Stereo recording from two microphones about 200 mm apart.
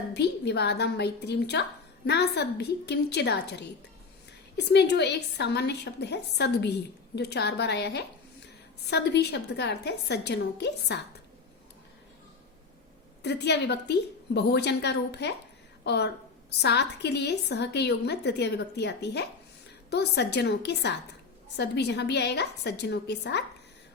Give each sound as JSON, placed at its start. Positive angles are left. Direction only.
{"t": 0.1, "sound": "a woman's voice", "side_deg": 55}
{"t": 13.2, "sound": "a woman's voice", "side_deg": 55}